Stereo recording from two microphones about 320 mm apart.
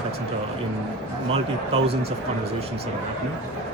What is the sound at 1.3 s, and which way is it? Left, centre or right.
Speech, centre.